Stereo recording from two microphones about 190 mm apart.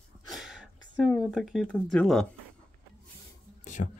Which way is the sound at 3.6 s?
40° left (ahead or behind).